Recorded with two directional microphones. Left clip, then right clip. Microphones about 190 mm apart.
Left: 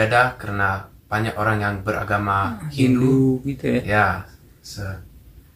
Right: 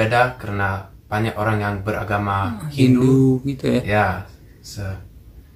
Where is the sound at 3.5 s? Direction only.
20° right (ahead or behind).